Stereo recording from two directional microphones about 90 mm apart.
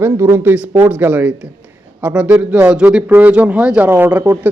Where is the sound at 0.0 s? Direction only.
25° right (ahead or behind).